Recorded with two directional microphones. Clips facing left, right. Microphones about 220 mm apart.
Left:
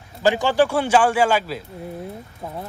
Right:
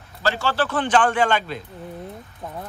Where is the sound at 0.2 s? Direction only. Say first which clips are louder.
Left 6 dB; 15° left (ahead or behind).